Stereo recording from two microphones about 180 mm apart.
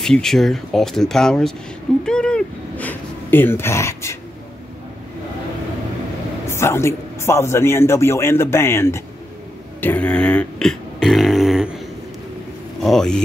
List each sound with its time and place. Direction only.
0.0 s speech: 5° left (ahead or behind)
6.4 s a man's voice: 15° left (ahead or behind); by 11.7 s centre (ahead or behind)
12.8 s speech: 5° left (ahead or behind)